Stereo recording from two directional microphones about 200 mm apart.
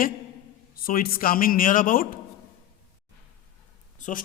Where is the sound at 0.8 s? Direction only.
45° left (ahead or behind).